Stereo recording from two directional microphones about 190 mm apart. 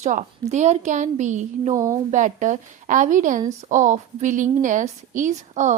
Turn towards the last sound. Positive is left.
turn(degrees=-40)  # may be behind; listen again after turning